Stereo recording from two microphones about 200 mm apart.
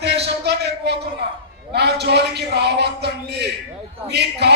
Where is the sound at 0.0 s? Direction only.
55° right (ahead or behind).